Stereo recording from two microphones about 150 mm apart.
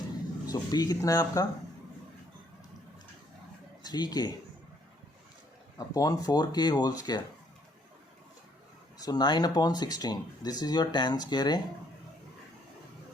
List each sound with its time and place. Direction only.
0.4 s speech: 25° left (ahead or behind)
3.8 s speech: 30° left (ahead or behind)
5.7 s speech: 25° left (ahead or behind)
9.0 s speech: 25° left (ahead or behind)